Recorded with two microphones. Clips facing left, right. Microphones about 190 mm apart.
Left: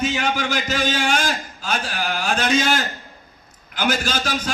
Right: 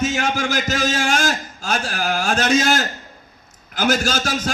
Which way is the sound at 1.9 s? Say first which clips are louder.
Right 4 dB; 45° right (ahead or behind).